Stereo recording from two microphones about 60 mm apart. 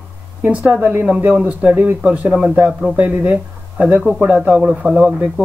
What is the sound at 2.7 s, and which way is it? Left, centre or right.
Speech, centre.